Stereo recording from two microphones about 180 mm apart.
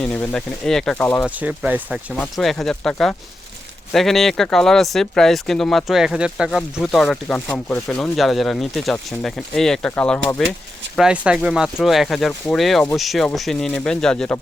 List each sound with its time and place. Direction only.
0.0 s speech: 5° left (ahead or behind)
1.4 s speech: 10° right (ahead or behind)